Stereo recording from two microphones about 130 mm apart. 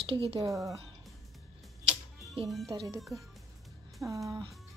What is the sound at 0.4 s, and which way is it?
Speech, 25° right (ahead or behind).